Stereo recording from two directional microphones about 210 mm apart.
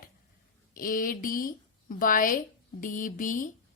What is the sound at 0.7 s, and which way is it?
A woman's voice, 40° left (ahead or behind).